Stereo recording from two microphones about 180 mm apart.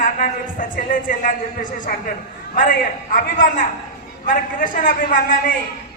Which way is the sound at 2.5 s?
50° left (ahead or behind).